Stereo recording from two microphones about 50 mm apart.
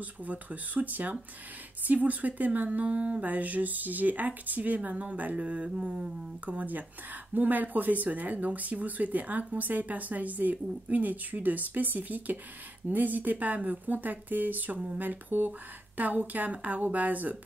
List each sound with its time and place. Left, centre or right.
0.0 s speech: right